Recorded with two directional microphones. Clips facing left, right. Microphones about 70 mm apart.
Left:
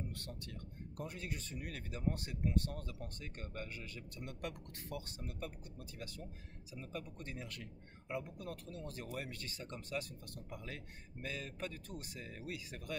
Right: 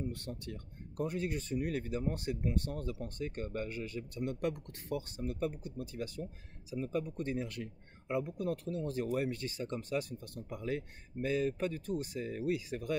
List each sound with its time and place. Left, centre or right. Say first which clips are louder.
0.1 s speech: right 6 dB; right